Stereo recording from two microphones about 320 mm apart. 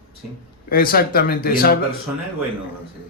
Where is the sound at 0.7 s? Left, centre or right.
Left.